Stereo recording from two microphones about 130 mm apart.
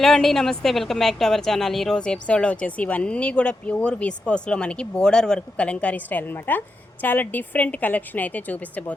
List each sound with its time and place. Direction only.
0.0 s a woman's voice: centre (ahead or behind)